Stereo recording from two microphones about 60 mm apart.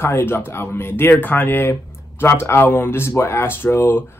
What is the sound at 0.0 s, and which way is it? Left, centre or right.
Speech, left.